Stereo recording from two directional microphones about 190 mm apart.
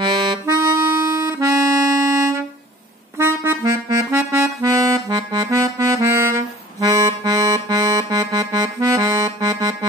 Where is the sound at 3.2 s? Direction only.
15° right (ahead or behind).